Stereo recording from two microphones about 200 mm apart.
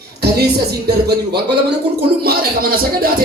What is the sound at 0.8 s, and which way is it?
Speech, 55° right (ahead or behind).